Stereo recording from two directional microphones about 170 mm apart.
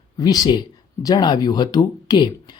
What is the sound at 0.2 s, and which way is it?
Speech, 25° left (ahead or behind).